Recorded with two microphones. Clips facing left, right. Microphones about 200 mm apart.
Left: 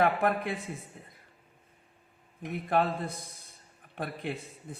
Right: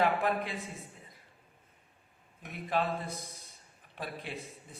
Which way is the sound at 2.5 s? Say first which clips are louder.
Left 5 dB; 55° left (ahead or behind).